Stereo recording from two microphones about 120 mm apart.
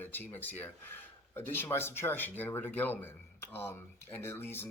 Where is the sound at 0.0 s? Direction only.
15° left (ahead or behind).